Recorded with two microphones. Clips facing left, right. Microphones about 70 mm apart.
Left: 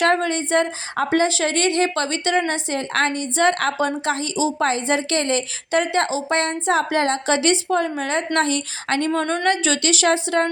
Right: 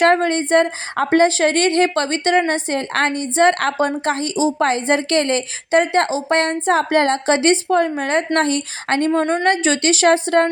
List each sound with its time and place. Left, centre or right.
0.0 s a woman's voice: right